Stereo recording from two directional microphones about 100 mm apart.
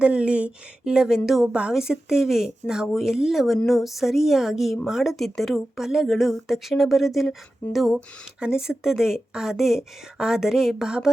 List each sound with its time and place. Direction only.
0.0 s a woman's voice: 10° right (ahead or behind)